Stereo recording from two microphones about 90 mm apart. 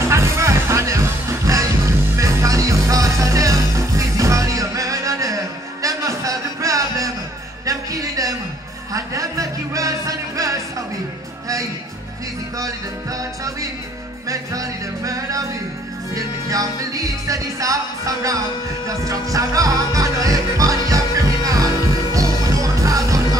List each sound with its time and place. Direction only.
0.0 s music: 30° right (ahead or behind)
7.6 s a sound: 40° right (ahead or behind)
8.9 s music: 40° right (ahead or behind)
12.5 s music: 40° right (ahead or behind)